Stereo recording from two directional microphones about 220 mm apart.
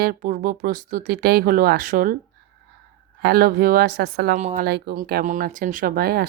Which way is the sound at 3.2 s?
45° right (ahead or behind).